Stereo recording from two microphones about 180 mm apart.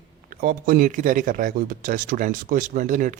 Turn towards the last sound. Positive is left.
turn(degrees=-45)  # may be behind; listen again after turning